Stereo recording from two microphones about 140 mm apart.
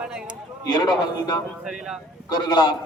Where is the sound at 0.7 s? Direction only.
30° left (ahead or behind).